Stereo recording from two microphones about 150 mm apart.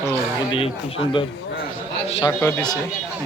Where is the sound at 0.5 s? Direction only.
40° left (ahead or behind).